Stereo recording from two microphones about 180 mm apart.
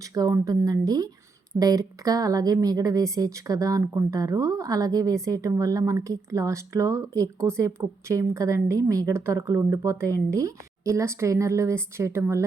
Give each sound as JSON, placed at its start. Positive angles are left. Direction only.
{"t": 0.1, "sound": "a woman's voice", "side_deg": -20}